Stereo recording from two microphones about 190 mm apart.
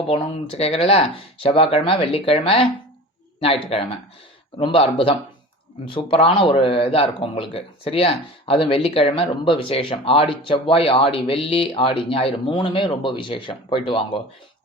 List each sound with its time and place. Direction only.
0.1 s speech: 30° left (ahead or behind)
5.9 s speech: 30° left (ahead or behind)